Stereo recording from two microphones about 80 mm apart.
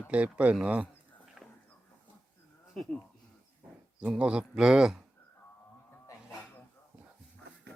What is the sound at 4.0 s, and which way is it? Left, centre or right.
Speech, centre.